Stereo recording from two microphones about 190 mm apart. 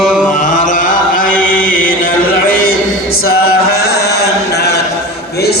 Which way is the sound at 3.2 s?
55° left (ahead or behind).